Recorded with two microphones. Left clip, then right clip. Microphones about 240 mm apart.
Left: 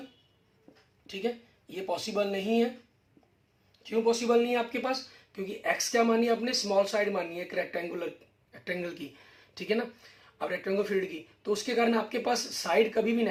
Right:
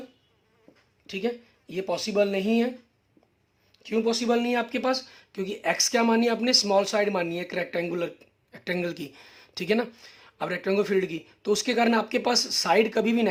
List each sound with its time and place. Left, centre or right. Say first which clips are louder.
1.0 s speech: right 4 dB; right
3.8 s speech: right 2 dB; right